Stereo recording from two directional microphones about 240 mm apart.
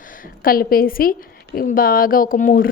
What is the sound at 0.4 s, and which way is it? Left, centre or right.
A woman's voice, left.